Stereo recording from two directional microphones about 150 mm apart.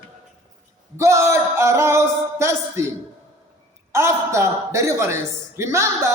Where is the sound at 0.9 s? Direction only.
20° right (ahead or behind).